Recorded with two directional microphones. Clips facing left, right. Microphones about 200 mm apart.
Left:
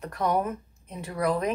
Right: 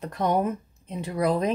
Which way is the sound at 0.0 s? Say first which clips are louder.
Right 2 dB; 25° right (ahead or behind).